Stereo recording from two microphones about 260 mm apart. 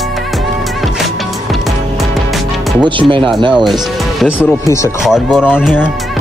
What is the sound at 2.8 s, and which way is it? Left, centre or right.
Speech, centre.